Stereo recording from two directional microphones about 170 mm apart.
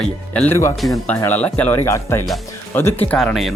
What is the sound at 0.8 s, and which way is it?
Speech, centre (ahead or behind).